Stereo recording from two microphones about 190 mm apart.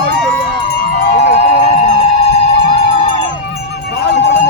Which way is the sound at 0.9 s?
60° left (ahead or behind).